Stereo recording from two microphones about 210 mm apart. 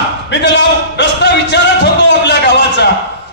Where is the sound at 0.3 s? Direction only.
60° left (ahead or behind).